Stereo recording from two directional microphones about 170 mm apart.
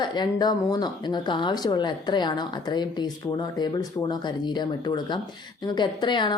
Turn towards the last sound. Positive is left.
turn(degrees=25)  # may be behind; listen again after turning